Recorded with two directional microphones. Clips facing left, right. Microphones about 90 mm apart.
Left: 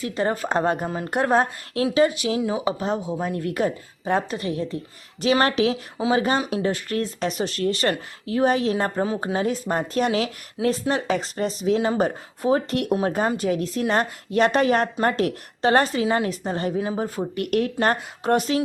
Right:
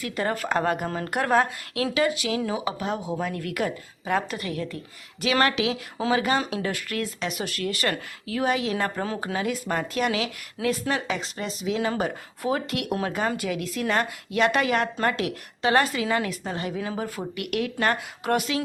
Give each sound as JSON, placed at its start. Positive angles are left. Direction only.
{"t": 0.0, "sound": "speech", "side_deg": 25}
{"t": 0.9, "sound": "speech", "side_deg": 15}